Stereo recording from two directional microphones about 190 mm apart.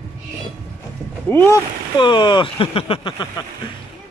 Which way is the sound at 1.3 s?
15° left (ahead or behind).